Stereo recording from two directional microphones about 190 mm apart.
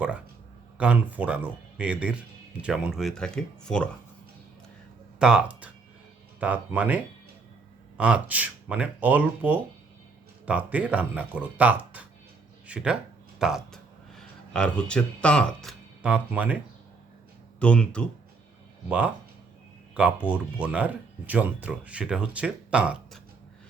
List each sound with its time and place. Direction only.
0.8 s speech: 10° right (ahead or behind)
5.2 s speech: 5° right (ahead or behind)
16.0 s speech: 5° right (ahead or behind)
17.6 s speech: 5° left (ahead or behind)
18.9 s speech: 5° right (ahead or behind)